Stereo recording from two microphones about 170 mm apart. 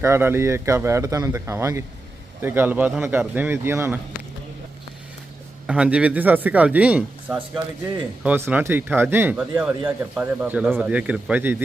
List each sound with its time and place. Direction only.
0.0 s speech: 15° right (ahead or behind)
5.6 s speech: 5° right (ahead or behind)